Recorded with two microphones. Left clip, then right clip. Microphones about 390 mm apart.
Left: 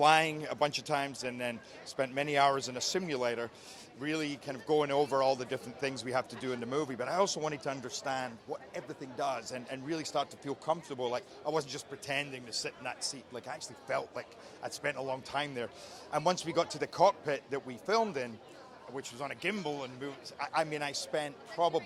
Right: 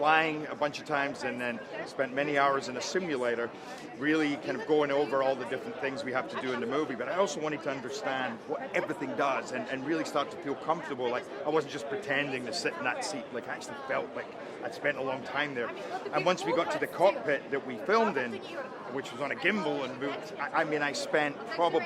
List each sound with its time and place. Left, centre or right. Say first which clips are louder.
0.0 s a man's voice: even; left
8.7 s a man's voice: right 10 dB; left
12.3 s speech: right 7 dB; left
14.8 s a man's voice: right 4 dB; left
19.2 s a man's voice: right 6 dB; left
21.1 s speech: right 7 dB; left